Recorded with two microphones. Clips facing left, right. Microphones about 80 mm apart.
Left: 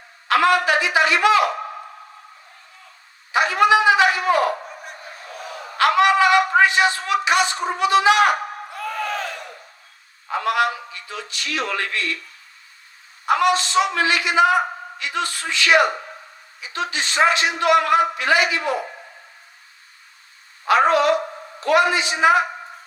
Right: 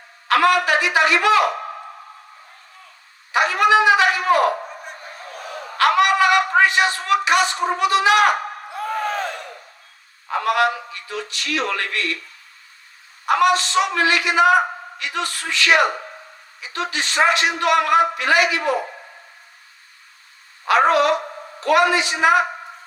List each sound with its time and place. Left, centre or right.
0.3 s speech: left
3.3 s a man's voice: left
5.7 s speech: left
8.3 s a sound: right
10.3 s a man's voice: left
10.6 s music: right
10.9 s speech: left
13.2 s speech: left
20.9 s a sound: left
21.6 s speech: left